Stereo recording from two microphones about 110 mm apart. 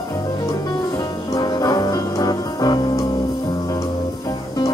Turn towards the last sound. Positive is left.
turn(degrees=35)  # may be behind; listen again after turning